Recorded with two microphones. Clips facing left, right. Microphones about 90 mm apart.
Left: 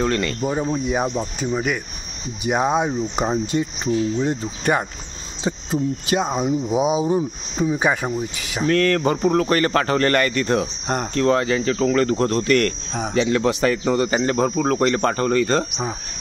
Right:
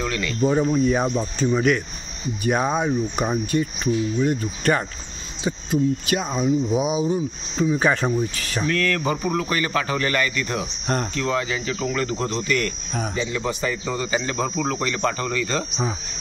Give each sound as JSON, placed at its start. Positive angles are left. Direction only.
{"t": 0.1, "sound": "speech", "side_deg": 50}
{"t": 0.4, "sound": "speech", "side_deg": 15}
{"t": 8.6, "sound": "speech", "side_deg": 40}
{"t": 13.1, "sound": "speech", "side_deg": 65}